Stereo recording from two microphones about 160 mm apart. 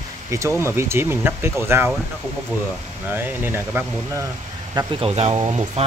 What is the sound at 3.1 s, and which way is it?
Speech, 15° right (ahead or behind).